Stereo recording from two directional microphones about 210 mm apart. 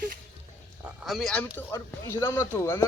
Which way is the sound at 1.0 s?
Centre (ahead or behind).